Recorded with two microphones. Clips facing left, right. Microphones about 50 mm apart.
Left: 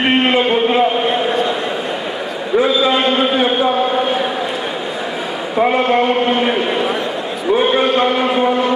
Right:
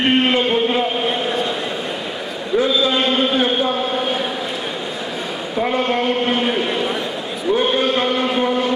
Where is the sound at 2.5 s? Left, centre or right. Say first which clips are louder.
Left 3 dB; centre.